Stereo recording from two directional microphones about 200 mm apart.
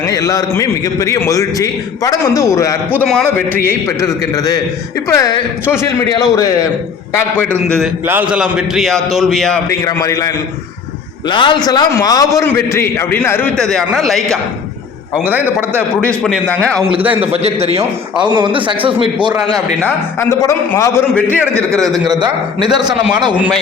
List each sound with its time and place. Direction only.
0.0 s a man's voice: 15° left (ahead or behind)
8.0 s a man's voice: 10° right (ahead or behind)
9.6 s a man's voice: 15° left (ahead or behind); by 16.1 s 10° right (ahead or behind)
16.2 s a man's voice: 5° left (ahead or behind)
17.2 s a man's voice: 30° right (ahead or behind)
19.8 s a man's voice: 15° left (ahead or behind)
21.2 s a man's voice: 10° right (ahead or behind)
21.8 s a man's voice: centre (ahead or behind)
22.0 s speech: 20° right (ahead or behind)